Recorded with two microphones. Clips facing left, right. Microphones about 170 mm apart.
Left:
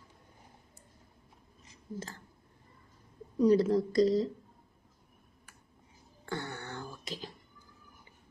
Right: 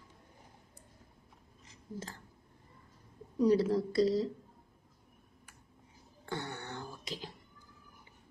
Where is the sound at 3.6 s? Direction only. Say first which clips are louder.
Left 3 dB; 5° right (ahead or behind).